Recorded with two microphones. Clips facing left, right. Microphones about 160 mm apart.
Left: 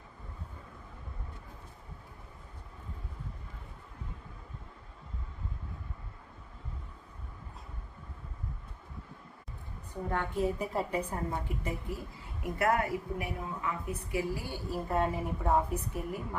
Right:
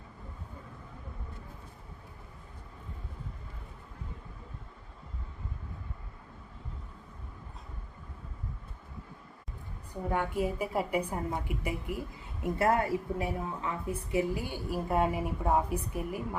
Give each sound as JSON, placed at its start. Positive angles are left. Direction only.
{"t": 10.1, "sound": "a woman's voice", "side_deg": -10}
{"t": 12.4, "sound": "a woman's voice", "side_deg": -30}